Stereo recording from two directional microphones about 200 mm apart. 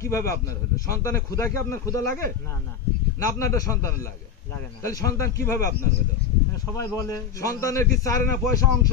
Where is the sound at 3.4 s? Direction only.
15° left (ahead or behind).